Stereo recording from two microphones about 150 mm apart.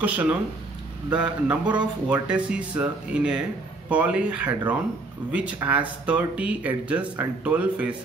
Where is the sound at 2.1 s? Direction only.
5° right (ahead or behind).